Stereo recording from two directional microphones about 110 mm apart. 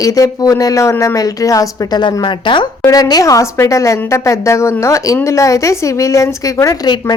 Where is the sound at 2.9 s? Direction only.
35° left (ahead or behind).